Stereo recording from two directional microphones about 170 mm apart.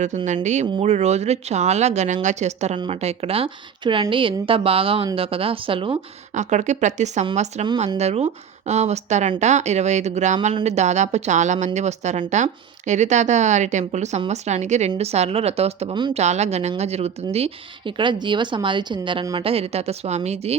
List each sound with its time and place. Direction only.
0.4 s a woman's voice: 45° right (ahead or behind)
6.3 s a woman's voice: 45° right (ahead or behind); by 16.1 s 30° right (ahead or behind)
16.1 s a woman's voice: 40° right (ahead or behind)